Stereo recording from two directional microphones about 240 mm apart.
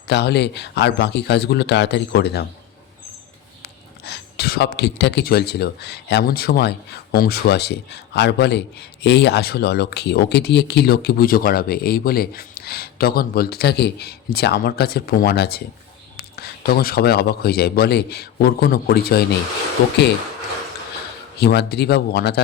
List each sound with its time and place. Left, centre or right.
0.1 s speech: left
3.6 s speech: left
21.3 s speech: left